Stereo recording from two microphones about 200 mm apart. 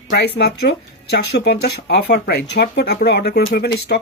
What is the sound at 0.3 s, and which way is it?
Speech, 55° left (ahead or behind).